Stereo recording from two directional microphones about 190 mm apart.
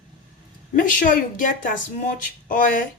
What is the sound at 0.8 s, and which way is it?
Speech, 45° left (ahead or behind).